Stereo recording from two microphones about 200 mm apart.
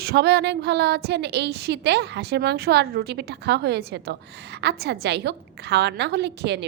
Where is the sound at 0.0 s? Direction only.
55° right (ahead or behind).